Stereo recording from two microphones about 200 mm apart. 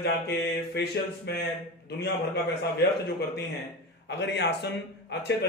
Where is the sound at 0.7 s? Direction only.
55° left (ahead or behind).